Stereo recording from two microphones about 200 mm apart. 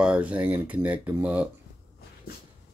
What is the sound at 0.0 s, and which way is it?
Speech, 5° right (ahead or behind).